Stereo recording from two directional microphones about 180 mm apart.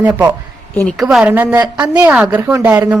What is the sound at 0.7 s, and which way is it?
Speech, 10° left (ahead or behind).